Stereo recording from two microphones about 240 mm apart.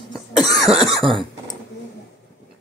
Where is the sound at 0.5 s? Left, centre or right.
Centre.